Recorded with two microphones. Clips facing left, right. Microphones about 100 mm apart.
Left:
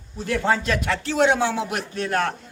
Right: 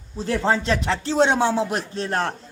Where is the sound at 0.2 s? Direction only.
30° right (ahead or behind).